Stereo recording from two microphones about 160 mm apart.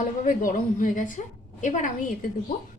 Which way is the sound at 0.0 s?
55° left (ahead or behind).